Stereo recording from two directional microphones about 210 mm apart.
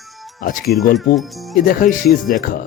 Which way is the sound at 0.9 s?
Centre (ahead or behind).